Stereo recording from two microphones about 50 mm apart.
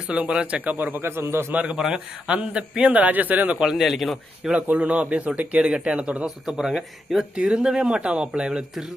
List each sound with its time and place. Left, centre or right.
0.1 s speech: right
1.0 s a man's voice: right
1.5 s speech: right
3.6 s speech: centre
4.5 s speech: right
6.2 s speech: centre
7.3 s speech: centre